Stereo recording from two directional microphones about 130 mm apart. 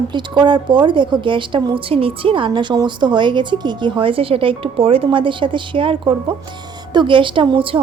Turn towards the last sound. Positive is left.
turn(degrees=-40)  # may be behind; listen again after turning